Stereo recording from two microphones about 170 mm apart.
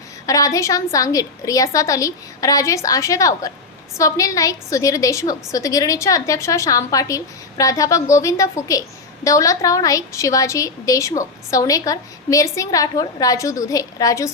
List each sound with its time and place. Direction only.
0.3 s a woman's voice: 20° left (ahead or behind)